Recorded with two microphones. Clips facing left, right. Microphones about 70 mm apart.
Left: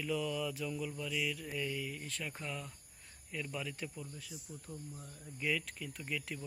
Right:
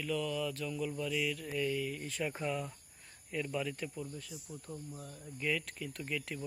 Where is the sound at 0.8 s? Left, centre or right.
Centre.